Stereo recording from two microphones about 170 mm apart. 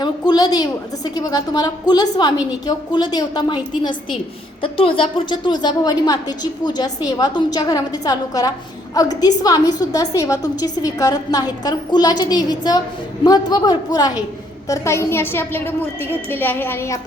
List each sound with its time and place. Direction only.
0.0 s a woman's voice: 25° left (ahead or behind)